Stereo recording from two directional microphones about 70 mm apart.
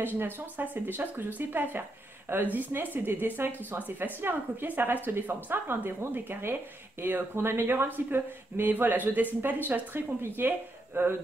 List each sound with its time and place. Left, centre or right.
0.0 s speech: right